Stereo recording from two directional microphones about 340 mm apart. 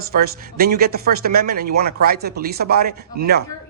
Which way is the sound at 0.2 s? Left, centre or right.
Right.